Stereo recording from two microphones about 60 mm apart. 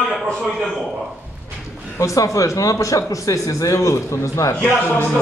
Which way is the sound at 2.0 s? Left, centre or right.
Left.